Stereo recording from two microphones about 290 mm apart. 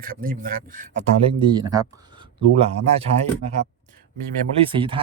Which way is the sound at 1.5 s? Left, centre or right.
Centre.